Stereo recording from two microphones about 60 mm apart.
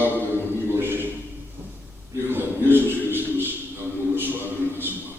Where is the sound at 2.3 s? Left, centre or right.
Right.